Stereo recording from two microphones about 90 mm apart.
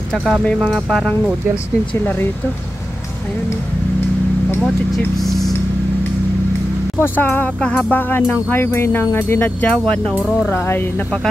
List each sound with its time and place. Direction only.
0.1 s speech: centre (ahead or behind)
4.6 s speech: centre (ahead or behind)
7.0 s speech: 20° left (ahead or behind)
10.4 s speech: 25° left (ahead or behind)